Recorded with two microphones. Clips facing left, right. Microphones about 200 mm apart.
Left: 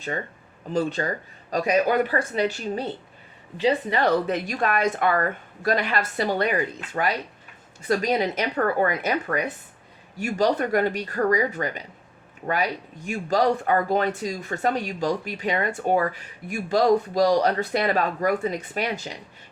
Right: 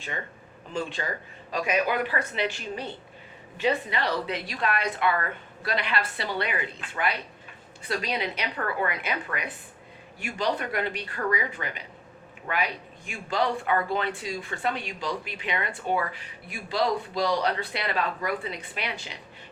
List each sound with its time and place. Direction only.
0.7 s speech: 40° left (ahead or behind)